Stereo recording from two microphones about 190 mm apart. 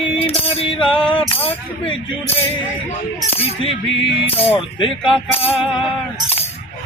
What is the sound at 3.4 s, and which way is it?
Music, 30° left (ahead or behind).